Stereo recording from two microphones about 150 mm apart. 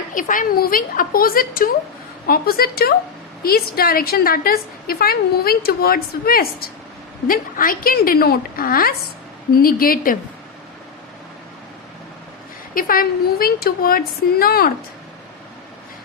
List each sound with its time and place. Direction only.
0.1 s a woman's voice: 60° left (ahead or behind)
2.2 s a woman's voice: 85° left
7.3 s a woman's voice: 70° left (ahead or behind)
12.7 s a woman's voice: 70° left (ahead or behind); by 14.7 s 90° left